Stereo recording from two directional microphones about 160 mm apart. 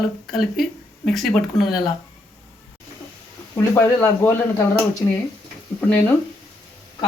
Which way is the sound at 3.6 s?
15° left (ahead or behind).